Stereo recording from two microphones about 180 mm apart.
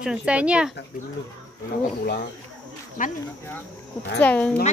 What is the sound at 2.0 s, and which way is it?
Speech, 60° left (ahead or behind).